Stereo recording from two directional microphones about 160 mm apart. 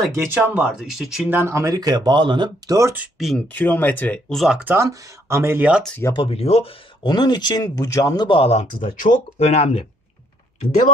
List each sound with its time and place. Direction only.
0.1 s speech: 15° right (ahead or behind)
0.7 s speech: centre (ahead or behind)
1.4 s speech: 20° right (ahead or behind)
2.9 s speech: 5° right (ahead or behind)
3.4 s speech: 10° left (ahead or behind); by 4.7 s 5° right (ahead or behind)
4.7 s speech: 20° right (ahead or behind)
5.9 s speech: 15° left (ahead or behind)
6.1 s speech: 35° left (ahead or behind)
9.0 s speech: 50° left (ahead or behind)